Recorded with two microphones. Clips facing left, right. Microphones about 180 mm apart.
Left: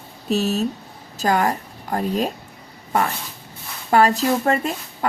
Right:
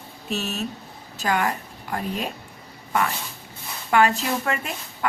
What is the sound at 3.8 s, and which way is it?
Speech, 35° left (ahead or behind).